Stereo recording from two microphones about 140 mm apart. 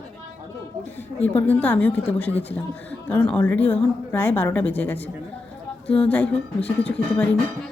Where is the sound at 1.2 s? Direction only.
10° left (ahead or behind).